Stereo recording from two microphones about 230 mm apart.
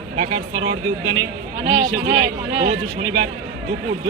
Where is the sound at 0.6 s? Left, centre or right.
Centre.